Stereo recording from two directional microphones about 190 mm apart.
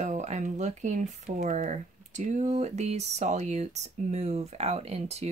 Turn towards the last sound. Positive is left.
turn(degrees=-35)  # may be behind; listen again after turning